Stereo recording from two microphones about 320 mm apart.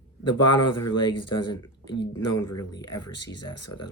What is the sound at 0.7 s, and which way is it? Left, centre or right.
Speech, left.